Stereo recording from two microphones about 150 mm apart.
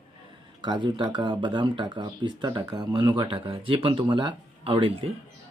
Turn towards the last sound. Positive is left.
turn(degrees=-40)  # may be behind; listen again after turning